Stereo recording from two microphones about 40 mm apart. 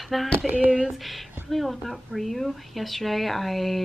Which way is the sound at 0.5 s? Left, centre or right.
Right.